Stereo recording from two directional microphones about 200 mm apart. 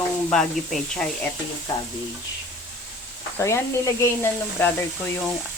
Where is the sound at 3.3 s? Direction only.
15° left (ahead or behind).